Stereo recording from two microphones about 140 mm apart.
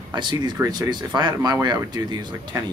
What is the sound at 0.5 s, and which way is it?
Speech, 20° right (ahead or behind).